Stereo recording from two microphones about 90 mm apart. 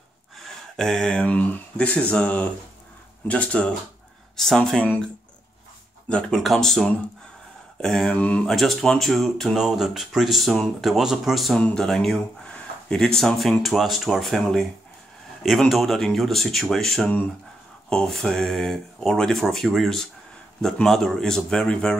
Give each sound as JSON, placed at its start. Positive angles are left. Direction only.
{"t": 0.7, "sound": "speech", "side_deg": 5}
{"t": 6.0, "sound": "speech", "side_deg": 10}
{"t": 8.1, "sound": "speech", "side_deg": 15}
{"t": 8.5, "sound": "speech", "side_deg": 0}